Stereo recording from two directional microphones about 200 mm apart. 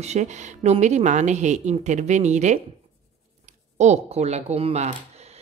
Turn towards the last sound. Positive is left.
turn(degrees=-35)  # may be behind; listen again after turning